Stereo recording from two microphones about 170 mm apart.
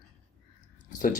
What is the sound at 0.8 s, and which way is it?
Speech, 50° left (ahead or behind).